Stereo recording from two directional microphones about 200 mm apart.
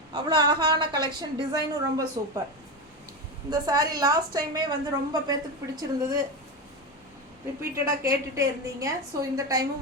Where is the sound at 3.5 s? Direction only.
20° right (ahead or behind).